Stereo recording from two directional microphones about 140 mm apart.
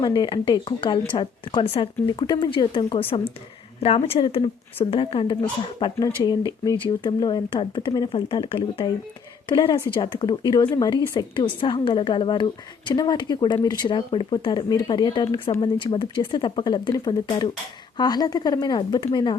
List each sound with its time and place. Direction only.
0.0 s a woman's voice: 35° left (ahead or behind)